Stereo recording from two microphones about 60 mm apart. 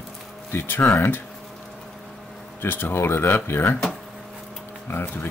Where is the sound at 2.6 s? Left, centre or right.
Left.